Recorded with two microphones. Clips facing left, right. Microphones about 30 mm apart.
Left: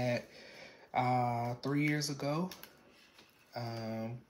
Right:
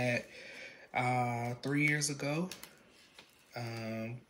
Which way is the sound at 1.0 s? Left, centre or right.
Right.